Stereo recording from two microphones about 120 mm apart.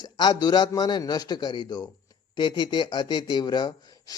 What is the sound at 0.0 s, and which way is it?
Speech, 35° left (ahead or behind).